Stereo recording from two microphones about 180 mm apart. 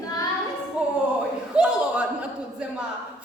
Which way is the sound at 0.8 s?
5° right (ahead or behind).